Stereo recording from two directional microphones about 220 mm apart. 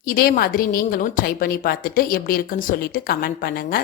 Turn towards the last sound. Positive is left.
turn(degrees=40)  # may be behind; listen again after turning